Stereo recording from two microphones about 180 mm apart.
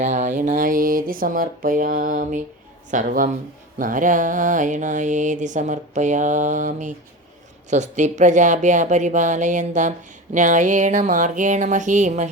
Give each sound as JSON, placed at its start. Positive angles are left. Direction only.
{"t": 0.0, "sound": "mantra", "side_deg": -40}